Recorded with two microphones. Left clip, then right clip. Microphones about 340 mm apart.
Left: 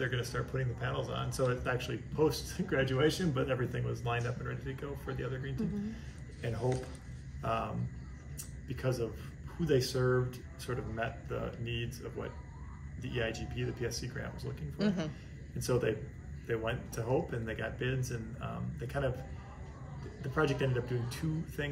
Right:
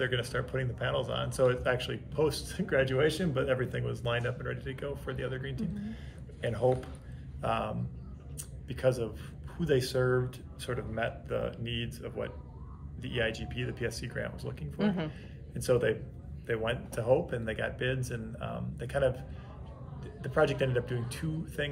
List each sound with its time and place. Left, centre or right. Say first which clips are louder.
0.0 s speech: right 4 dB; centre
7.4 s speech: right 3 dB; centre
14.8 s a man's voice: right 2 dB; centre
15.6 s speech: right 5 dB; centre
20.2 s speech: right 4 dB; centre